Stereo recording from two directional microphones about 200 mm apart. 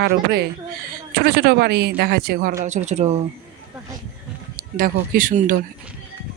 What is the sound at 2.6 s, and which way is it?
Speech, 35° right (ahead or behind).